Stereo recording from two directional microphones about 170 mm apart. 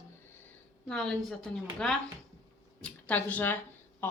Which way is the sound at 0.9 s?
5° left (ahead or behind).